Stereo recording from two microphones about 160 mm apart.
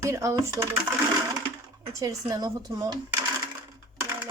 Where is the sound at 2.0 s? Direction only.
25° right (ahead or behind).